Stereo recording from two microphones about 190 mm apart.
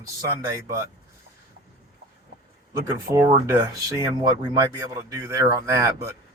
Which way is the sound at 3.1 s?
15° right (ahead or behind).